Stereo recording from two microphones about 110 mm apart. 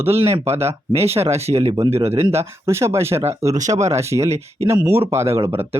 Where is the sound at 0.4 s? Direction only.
70° right (ahead or behind).